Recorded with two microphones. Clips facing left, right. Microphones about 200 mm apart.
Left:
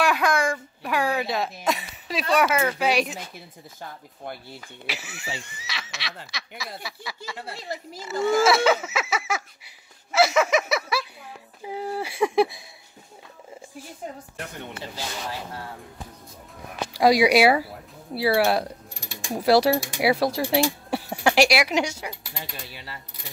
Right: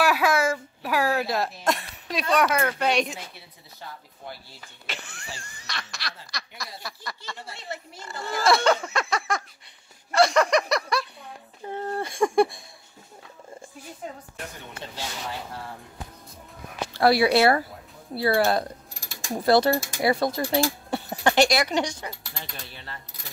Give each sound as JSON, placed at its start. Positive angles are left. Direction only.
{"t": 0.0, "sound": "a sound", "side_deg": -5}
{"t": 3.8, "sound": "speech", "side_deg": 50}
{"t": 4.8, "sound": "speech", "side_deg": 5}
{"t": 14.8, "sound": "speech", "side_deg": 0}
{"t": 16.9, "sound": "speech", "side_deg": 15}